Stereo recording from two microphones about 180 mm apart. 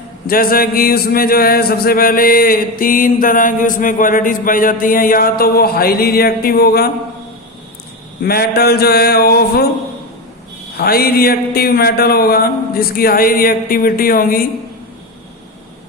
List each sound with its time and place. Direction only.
0.3 s a sound: 55° left (ahead or behind)
8.2 s speech: 60° left (ahead or behind)
10.8 s speech: 60° left (ahead or behind)